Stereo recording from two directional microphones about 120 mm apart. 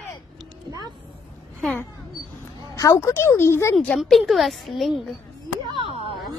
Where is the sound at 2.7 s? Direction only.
25° left (ahead or behind).